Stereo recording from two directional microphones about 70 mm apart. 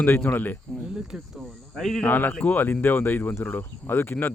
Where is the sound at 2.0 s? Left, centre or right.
Left.